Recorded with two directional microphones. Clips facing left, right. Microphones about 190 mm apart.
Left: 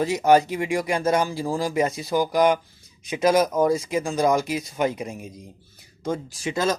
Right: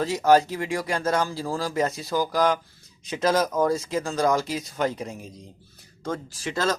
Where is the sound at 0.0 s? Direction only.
15° left (ahead or behind).